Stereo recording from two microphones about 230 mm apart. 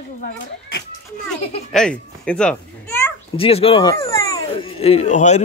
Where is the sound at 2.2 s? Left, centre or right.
Centre.